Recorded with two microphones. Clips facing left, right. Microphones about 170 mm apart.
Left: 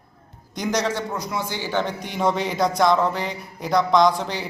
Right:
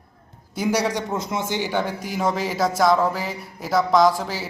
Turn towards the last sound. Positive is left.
turn(degrees=-5)  # may be behind; listen again after turning